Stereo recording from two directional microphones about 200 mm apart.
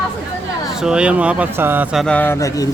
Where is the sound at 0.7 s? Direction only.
5° right (ahead or behind).